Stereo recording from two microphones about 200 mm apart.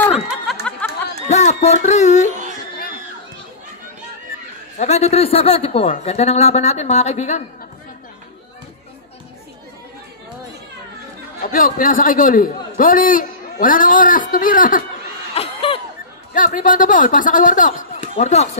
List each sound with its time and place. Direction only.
0.3 s a sound: centre (ahead or behind)
1.3 s speech: 35° left (ahead or behind)
4.7 s speech: 30° left (ahead or behind)
11.4 s a man's voice: 45° left (ahead or behind)
15.3 s a sound: 25° left (ahead or behind)
16.3 s speech: 40° left (ahead or behind)